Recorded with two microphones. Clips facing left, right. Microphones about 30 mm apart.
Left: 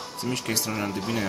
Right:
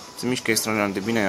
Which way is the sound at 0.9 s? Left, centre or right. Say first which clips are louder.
Right 5 dB; right.